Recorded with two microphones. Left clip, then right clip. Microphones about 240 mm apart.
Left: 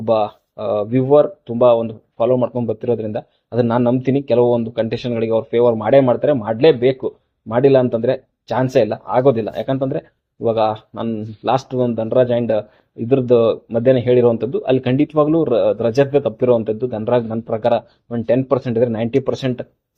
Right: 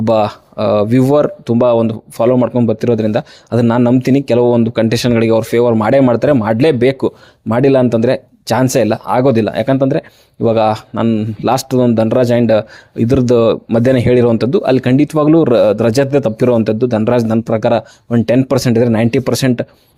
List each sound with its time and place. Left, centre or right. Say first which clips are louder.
0.0 s speech: right 4 dB; right